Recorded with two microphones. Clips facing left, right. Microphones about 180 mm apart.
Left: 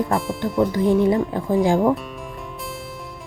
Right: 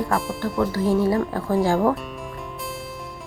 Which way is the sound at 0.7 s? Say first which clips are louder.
Left 2 dB; 20° left (ahead or behind).